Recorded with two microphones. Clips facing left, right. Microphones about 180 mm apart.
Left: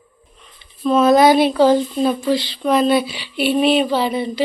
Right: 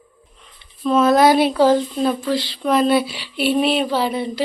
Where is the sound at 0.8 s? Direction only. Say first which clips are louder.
Left 2 dB; 5° right (ahead or behind).